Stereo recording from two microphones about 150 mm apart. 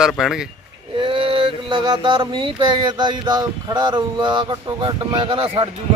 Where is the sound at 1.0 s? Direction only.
35° right (ahead or behind).